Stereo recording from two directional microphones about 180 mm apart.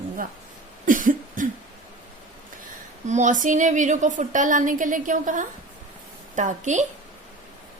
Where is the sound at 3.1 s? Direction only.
40° right (ahead or behind).